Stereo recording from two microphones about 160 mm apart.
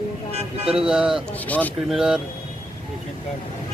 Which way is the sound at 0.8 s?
5° right (ahead or behind).